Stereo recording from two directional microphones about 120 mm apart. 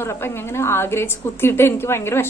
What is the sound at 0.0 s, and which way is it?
A woman's voice, 20° left (ahead or behind).